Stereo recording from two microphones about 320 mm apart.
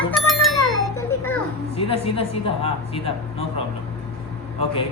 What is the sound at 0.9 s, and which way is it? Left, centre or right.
Children playing, centre.